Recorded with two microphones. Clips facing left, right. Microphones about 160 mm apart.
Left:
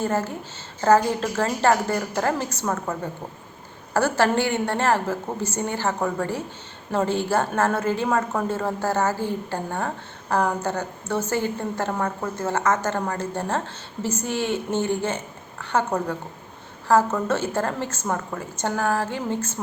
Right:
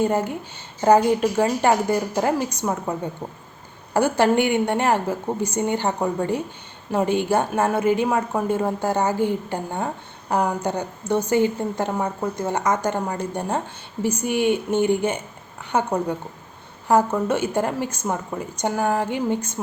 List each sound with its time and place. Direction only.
0.0 s a woman's voice: 15° right (ahead or behind)